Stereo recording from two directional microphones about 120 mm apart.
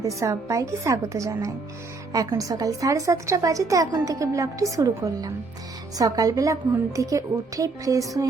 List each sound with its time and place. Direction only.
0.0 s a woman's voice: 25° right (ahead or behind)